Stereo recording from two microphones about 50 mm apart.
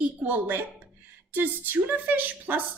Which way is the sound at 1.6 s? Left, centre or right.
Right.